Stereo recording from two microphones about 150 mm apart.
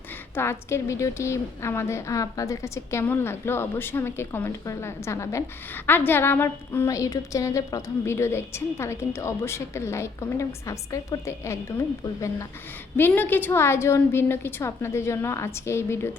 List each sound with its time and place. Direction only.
0.3 s a woman's voice: 15° left (ahead or behind)
13.0 s a woman's voice: 15° left (ahead or behind)